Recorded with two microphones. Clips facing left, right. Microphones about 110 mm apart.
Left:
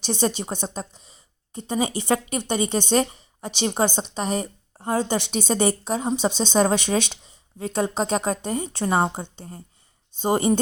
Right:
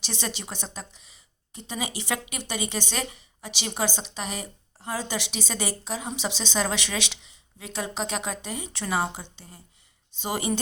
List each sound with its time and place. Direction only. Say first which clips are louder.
0.0 s a woman's voice: left 10 dB; 45° left (ahead or behind)